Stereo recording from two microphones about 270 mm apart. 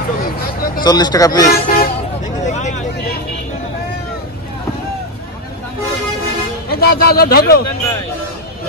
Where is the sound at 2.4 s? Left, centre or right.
Left.